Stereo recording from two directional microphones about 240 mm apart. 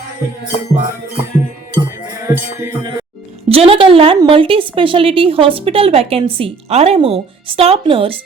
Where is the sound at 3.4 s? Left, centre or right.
Right.